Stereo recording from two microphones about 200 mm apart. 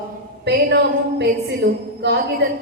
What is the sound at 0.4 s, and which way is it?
A woman's voice, 55° right (ahead or behind).